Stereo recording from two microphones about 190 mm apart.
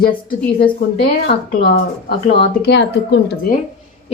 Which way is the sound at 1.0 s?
55° left (ahead or behind).